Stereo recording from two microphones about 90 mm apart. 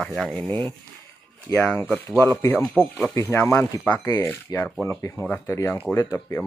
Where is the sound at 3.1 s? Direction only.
25° left (ahead or behind).